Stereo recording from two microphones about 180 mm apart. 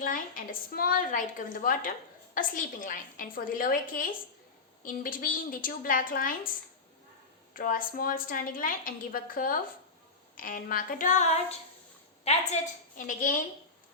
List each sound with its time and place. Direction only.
0.0 s a woman's voice: 50° left (ahead or behind)
7.5 s a woman's voice: 50° left (ahead or behind)
13.0 s a woman's voice: 50° left (ahead or behind)